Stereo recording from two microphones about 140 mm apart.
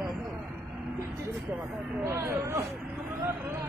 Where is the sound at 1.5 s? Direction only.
20° right (ahead or behind).